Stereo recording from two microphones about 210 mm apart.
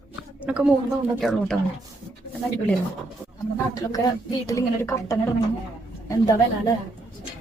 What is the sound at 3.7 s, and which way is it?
Speech, 15° left (ahead or behind).